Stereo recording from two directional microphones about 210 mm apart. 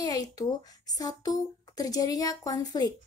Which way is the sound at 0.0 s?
20° left (ahead or behind).